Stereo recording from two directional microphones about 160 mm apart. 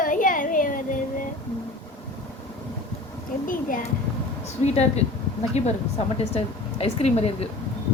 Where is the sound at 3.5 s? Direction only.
60° left (ahead or behind).